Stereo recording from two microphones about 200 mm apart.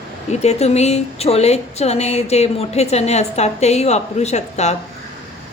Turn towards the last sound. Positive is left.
turn(degrees=35)  # may be behind; listen again after turning